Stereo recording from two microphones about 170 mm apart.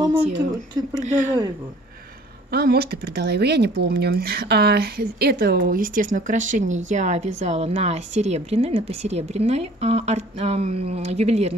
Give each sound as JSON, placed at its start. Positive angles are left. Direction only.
{"t": 1.0, "sound": "speech", "side_deg": -45}
{"t": 2.5, "sound": "a woman's voice", "side_deg": -65}